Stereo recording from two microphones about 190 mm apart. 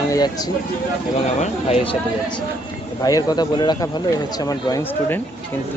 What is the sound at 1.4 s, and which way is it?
Speech, 30° left (ahead or behind).